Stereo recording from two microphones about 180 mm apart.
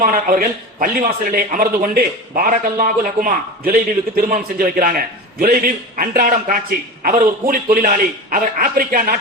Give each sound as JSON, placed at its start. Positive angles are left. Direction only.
{"t": 0.0, "sound": "a man's voice", "side_deg": -50}